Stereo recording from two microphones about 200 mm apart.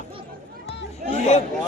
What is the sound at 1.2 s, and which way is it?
Speech, 35° left (ahead or behind).